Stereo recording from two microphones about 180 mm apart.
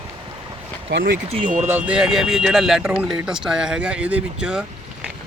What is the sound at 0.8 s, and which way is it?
Speech, 70° right (ahead or behind).